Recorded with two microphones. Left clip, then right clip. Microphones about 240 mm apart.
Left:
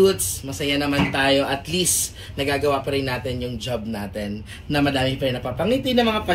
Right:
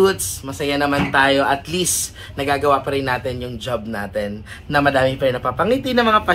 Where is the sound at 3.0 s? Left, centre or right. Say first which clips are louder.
Right 4 dB; centre.